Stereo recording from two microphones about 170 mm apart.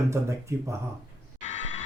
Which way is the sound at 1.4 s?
45° left (ahead or behind).